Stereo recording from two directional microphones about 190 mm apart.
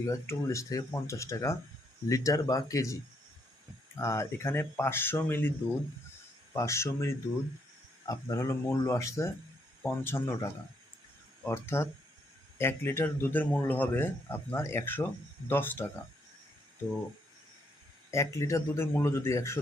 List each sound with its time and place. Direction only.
0.0 s a man's voice: 15° left (ahead or behind)
18.1 s a man's voice: 15° left (ahead or behind)